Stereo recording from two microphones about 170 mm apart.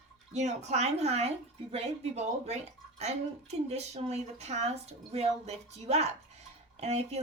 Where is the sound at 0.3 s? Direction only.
40° right (ahead or behind).